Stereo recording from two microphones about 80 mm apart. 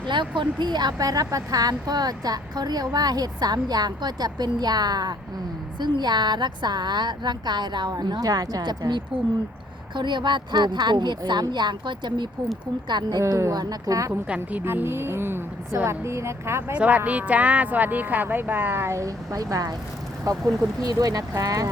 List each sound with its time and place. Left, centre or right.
0.0 s speech: right
12.9 s a woman's voice: right
14.1 s a woman's voice: centre
14.6 s speech: right
16.7 s a woman's voice: centre; by 21.7 s right